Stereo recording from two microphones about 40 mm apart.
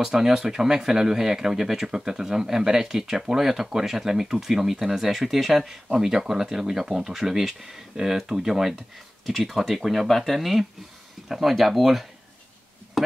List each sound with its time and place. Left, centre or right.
0.0 s speech: centre
9.2 s speech: centre
13.0 s a sound: centre